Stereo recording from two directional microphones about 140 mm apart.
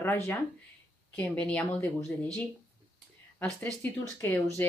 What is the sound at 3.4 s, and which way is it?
Speech, 10° left (ahead or behind).